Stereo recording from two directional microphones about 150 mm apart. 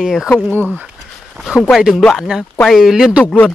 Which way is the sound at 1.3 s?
5° right (ahead or behind).